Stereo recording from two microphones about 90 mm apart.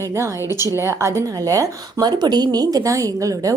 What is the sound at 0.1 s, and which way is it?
Speech, 35° right (ahead or behind).